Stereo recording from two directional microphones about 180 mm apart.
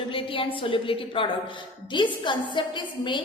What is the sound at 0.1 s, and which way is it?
A woman's voice, 30° left (ahead or behind).